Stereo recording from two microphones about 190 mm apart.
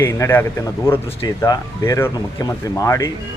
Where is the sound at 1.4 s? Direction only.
20° left (ahead or behind).